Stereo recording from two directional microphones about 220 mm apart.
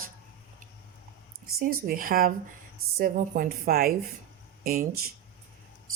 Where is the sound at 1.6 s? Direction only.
40° right (ahead or behind).